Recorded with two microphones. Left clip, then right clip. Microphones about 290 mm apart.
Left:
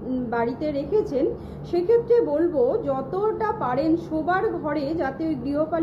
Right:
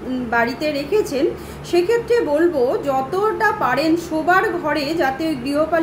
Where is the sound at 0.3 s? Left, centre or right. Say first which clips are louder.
Right 7 dB; centre.